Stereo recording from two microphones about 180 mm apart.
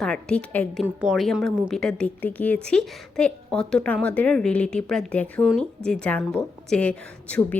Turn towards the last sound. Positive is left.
turn(degrees=10)  # may be behind; listen again after turning